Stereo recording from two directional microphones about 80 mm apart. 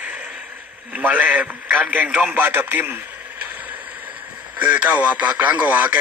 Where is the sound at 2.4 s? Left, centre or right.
Right.